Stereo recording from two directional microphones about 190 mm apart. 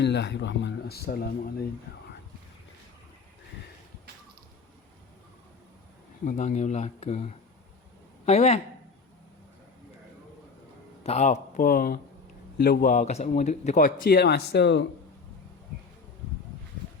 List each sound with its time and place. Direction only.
0.0 s speech: 65° left (ahead or behind)
6.2 s speech: 40° left (ahead or behind)
11.0 s speech: 35° left (ahead or behind); by 14.8 s 65° left (ahead or behind)